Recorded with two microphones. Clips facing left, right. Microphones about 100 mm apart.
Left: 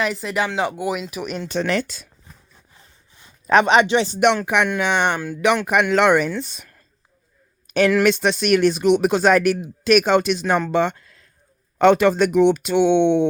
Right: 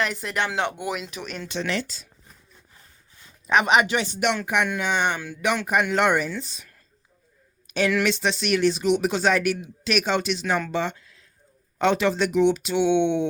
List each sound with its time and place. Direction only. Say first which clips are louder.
0.0 s speech: left 4 dB; centre (ahead or behind)
1.2 s speech: left 7 dB; 20° left (ahead or behind)
1.5 s speech: left 5 dB; 50° left (ahead or behind)
3.4 s speech: left 5 dB; 35° left (ahead or behind)
4.4 s speech: left 4 dB; 70° left (ahead or behind); by 5.4 s 55° left (ahead or behind)
5.6 s speech: left 3 dB; 90° left; by 6.7 s 60° left (ahead or behind)
7.7 s speech: left 6 dB; 50° left (ahead or behind)
10.7 s a sound: left 7 dB; 55° left (ahead or behind)
11.8 s speech: left 7 dB; 55° left (ahead or behind)